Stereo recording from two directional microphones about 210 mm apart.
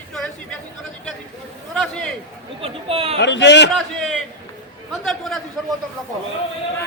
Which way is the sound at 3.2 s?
55° left (ahead or behind).